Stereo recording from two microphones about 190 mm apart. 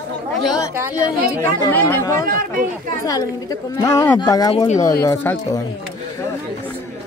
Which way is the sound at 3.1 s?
20° left (ahead or behind).